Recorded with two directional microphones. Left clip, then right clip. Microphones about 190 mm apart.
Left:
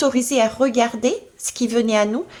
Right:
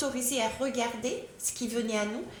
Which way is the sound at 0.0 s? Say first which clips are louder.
Left 13 dB; 35° left (ahead or behind).